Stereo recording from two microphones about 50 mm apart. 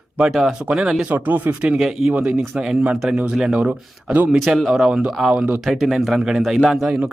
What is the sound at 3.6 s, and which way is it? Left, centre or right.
Speech, right.